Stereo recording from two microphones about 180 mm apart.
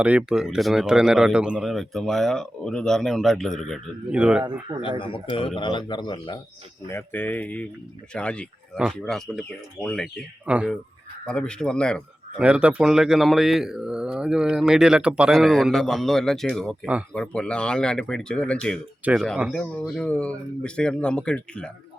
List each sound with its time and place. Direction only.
0.0 s speech: 5° right (ahead or behind)
4.8 s speech: 30° left (ahead or behind)
6.9 s speech: 10° left (ahead or behind)
10.4 s speech: 5° right (ahead or behind)
11.3 s speech: 5° left (ahead or behind)